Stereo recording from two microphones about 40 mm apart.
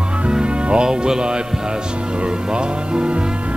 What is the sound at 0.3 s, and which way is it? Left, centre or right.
Music, right.